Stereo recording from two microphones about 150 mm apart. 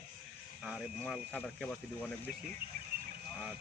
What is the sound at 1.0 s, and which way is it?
Speech, 10° left (ahead or behind).